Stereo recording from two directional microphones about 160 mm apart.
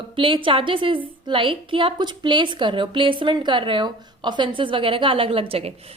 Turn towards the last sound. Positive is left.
turn(degrees=-35)  # may be behind; listen again after turning